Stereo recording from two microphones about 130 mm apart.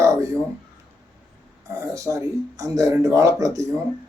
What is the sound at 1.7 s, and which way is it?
Speech, 25° right (ahead or behind).